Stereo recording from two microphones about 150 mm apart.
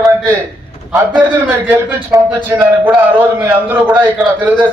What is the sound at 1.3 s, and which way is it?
A man's voice, 15° right (ahead or behind).